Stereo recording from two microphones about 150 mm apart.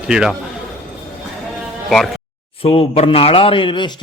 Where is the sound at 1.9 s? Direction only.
Centre (ahead or behind).